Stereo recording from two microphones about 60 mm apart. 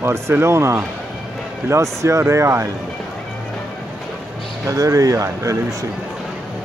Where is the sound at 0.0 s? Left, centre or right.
Right.